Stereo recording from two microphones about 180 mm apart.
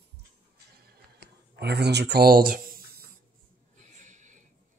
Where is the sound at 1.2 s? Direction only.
65° right (ahead or behind).